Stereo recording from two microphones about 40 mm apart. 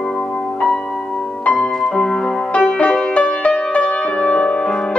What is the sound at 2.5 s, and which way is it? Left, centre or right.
Music, left.